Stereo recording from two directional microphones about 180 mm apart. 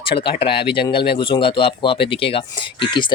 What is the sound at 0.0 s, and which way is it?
Speech, 30° left (ahead or behind).